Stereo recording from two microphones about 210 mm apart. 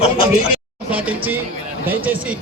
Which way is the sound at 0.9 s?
5° right (ahead or behind).